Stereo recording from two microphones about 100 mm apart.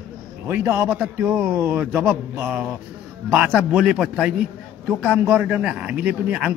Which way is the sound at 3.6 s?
10° right (ahead or behind).